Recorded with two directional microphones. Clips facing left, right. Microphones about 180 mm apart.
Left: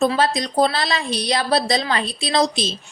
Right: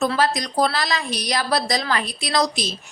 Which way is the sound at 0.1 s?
25° left (ahead or behind).